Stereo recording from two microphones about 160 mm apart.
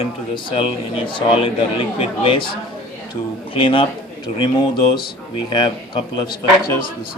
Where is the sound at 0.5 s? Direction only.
35° left (ahead or behind).